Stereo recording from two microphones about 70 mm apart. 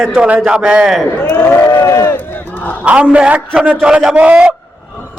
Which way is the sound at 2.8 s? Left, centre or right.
Centre.